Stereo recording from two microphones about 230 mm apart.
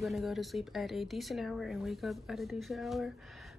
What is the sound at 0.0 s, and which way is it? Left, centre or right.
A woman's voice, centre.